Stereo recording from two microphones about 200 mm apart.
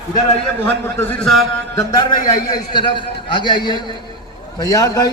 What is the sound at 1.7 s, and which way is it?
A man's voice, 20° left (ahead or behind).